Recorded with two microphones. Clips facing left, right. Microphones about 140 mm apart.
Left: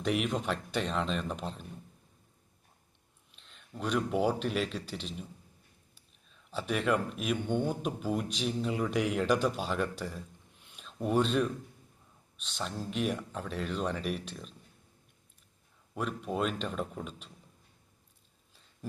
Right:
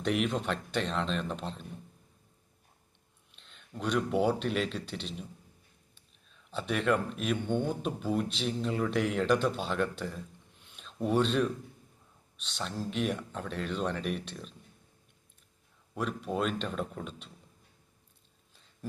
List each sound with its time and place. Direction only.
0.0 s speech: 5° left (ahead or behind)
3.3 s speech: centre (ahead or behind)
6.2 s speech: 5° left (ahead or behind)
16.0 s speech: centre (ahead or behind)